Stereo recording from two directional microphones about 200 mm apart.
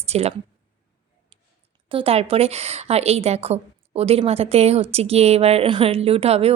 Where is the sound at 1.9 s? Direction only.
30° right (ahead or behind).